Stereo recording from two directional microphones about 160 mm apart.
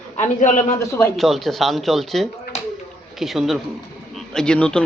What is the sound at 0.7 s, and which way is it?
Speech, 15° left (ahead or behind).